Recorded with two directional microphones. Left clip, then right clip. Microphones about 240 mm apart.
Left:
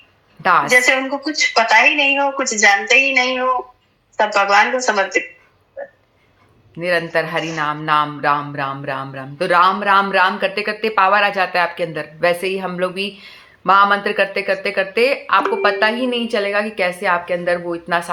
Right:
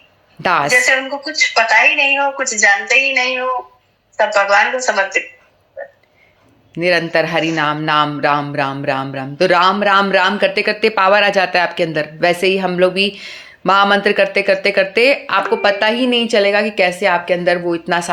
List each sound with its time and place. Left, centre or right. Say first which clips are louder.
0.4 s music: even; right
0.7 s a woman's voice: right 1 dB; left
5.8 s a sound: right 1 dB; left
6.7 s music: right 4 dB; right